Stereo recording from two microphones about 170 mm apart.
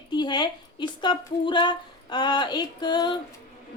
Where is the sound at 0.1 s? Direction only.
25° left (ahead or behind).